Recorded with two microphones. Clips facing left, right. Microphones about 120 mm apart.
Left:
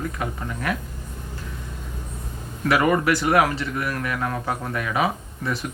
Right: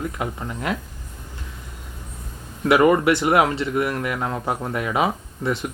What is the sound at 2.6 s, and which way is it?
Speech, 25° right (ahead or behind).